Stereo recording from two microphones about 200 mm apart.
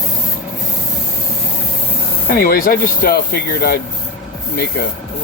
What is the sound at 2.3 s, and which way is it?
Speech, 45° left (ahead or behind).